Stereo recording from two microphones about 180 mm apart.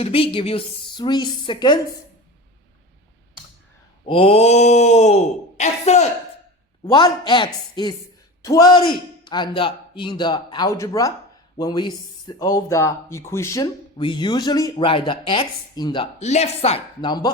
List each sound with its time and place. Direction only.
0.0 s speech: 30° left (ahead or behind)
4.0 s speech: 30° left (ahead or behind)
6.8 s a man's voice: 25° left (ahead or behind)
16.2 s speech: 35° left (ahead or behind)